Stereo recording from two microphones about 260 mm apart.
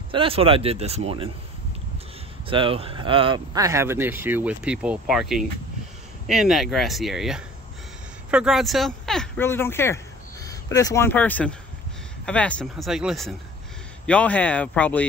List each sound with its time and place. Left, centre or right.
0.1 s speech: right
2.4 s speech: centre